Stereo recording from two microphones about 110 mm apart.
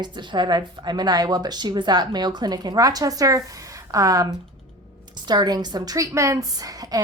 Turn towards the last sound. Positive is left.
turn(degrees=-35)  # may be behind; listen again after turning